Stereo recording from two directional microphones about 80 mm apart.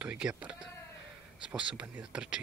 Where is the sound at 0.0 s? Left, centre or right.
Centre.